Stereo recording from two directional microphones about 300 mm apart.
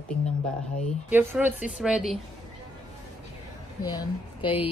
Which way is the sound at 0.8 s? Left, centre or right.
Centre.